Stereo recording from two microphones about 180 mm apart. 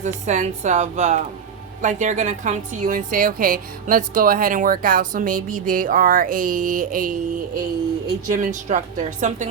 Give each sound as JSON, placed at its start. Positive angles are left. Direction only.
{"t": 0.0, "sound": "a woman's voice", "side_deg": -40}